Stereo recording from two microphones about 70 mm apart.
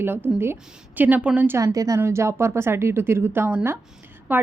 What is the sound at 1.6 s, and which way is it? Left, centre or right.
A woman's voice, right.